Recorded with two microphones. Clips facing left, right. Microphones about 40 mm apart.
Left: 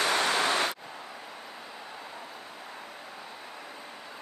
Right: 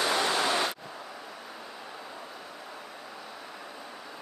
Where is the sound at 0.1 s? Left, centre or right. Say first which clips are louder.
Left 1 dB; left.